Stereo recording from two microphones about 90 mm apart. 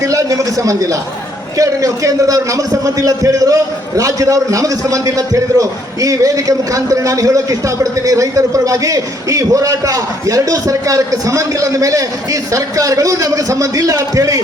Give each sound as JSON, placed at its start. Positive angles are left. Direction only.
{"t": 0.0, "sound": "a man's voice", "side_deg": -40}